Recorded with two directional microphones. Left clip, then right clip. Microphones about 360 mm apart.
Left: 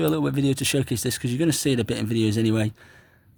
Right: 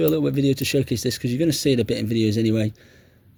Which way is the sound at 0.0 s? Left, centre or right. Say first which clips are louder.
Right 3 dB; centre.